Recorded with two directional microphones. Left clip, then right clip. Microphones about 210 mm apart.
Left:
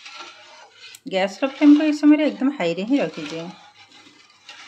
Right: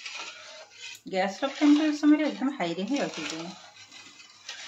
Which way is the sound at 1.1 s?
50° left (ahead or behind).